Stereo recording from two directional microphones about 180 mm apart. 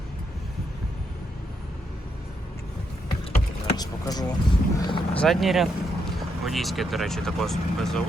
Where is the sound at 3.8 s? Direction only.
20° left (ahead or behind).